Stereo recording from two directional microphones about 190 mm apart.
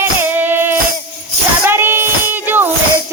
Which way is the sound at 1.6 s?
10° right (ahead or behind).